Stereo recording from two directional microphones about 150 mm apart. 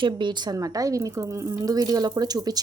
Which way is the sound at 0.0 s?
30° right (ahead or behind).